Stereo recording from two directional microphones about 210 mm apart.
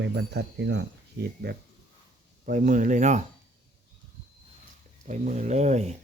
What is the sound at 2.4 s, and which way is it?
Speech, 40° right (ahead or behind).